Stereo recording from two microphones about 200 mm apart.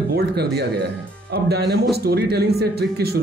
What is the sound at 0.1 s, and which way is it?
Speech, 55° right (ahead or behind).